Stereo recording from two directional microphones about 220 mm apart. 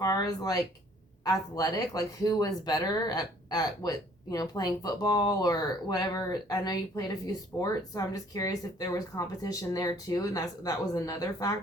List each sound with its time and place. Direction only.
0.0 s speech: 15° left (ahead or behind)